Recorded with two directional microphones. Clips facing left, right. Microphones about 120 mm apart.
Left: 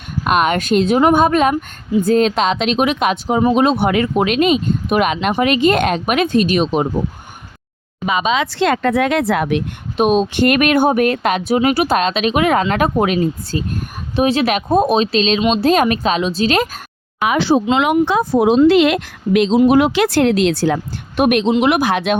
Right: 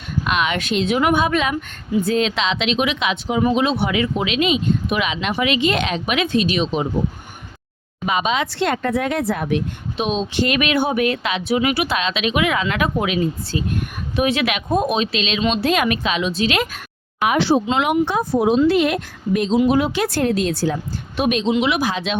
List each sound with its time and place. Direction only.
0.3 s speech: 45° left (ahead or behind)
8.5 s speech: 90° left
10.0 s a woman's voice: 50° left (ahead or behind)
18.0 s speech: 90° left
19.6 s speech: 70° left (ahead or behind)